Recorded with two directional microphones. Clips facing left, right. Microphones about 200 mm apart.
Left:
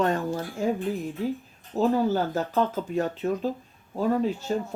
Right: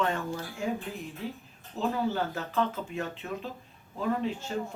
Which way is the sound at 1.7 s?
40° left (ahead or behind).